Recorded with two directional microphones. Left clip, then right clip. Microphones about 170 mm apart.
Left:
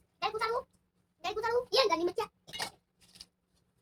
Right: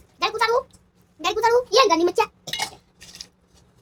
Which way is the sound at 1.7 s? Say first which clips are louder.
Right 8 dB; 40° right (ahead or behind).